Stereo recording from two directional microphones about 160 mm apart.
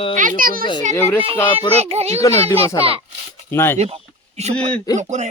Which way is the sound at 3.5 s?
15° left (ahead or behind).